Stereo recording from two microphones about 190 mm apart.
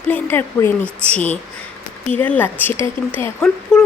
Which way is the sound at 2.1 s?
10° left (ahead or behind).